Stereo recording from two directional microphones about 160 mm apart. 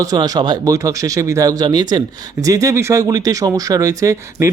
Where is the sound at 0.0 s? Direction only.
25° right (ahead or behind).